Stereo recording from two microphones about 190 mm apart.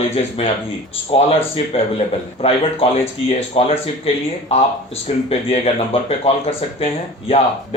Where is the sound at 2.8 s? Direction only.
30° left (ahead or behind).